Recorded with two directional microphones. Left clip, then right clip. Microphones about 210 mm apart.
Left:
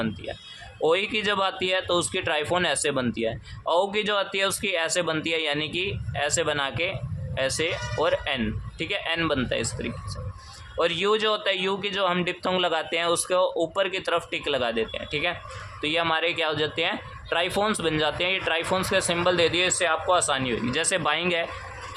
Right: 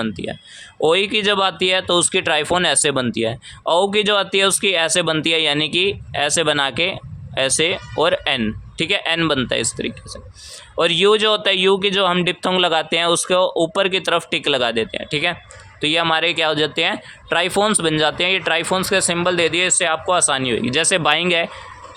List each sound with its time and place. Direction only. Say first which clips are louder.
0.0 s speech: right 6 dB; 35° right (ahead or behind)